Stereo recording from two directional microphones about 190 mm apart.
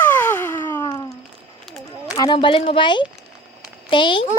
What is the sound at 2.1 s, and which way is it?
A child's voice, 25° left (ahead or behind).